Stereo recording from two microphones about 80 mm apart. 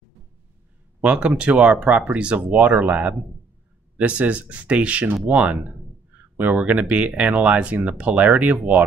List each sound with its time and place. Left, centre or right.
1.0 s speech: centre